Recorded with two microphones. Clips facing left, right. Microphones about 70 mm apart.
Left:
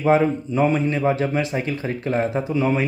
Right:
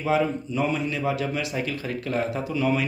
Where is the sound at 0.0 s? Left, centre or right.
Left.